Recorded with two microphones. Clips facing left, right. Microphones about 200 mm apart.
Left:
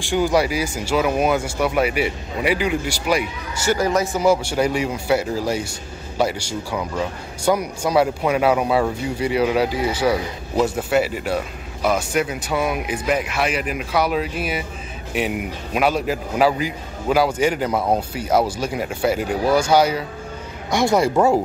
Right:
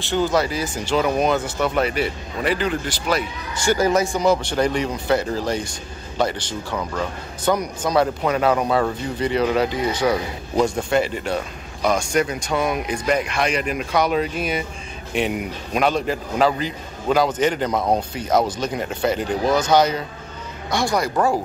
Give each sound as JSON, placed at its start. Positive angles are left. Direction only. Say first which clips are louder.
{"t": 0.0, "sound": "speech", "louder": "left 2 dB", "side_deg": 10}
{"t": 20.7, "sound": "speech", "louder": "left 4 dB", "side_deg": 25}